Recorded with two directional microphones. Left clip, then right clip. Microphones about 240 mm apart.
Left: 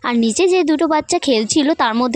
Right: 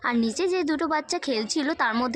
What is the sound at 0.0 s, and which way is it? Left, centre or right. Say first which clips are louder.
A woman's voice: left 9 dB; left.